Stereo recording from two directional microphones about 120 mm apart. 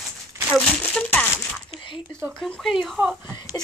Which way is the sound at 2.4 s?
Centre (ahead or behind).